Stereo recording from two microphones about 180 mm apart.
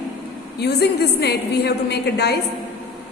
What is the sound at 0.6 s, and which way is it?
A woman's voice, 70° left (ahead or behind).